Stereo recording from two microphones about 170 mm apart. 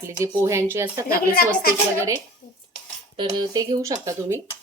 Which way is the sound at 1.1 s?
60° left (ahead or behind).